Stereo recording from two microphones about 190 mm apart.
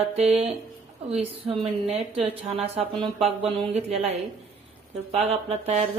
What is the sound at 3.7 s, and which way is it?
Speech, 35° right (ahead or behind).